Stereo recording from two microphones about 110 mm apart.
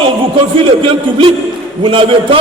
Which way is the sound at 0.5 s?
50° right (ahead or behind).